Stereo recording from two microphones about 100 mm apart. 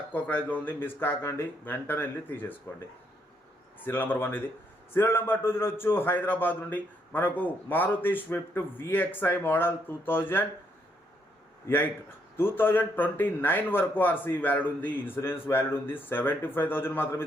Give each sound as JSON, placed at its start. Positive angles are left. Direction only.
{"t": 0.1, "sound": "a man's voice", "side_deg": 15}
{"t": 12.4, "sound": "a man's voice", "side_deg": 20}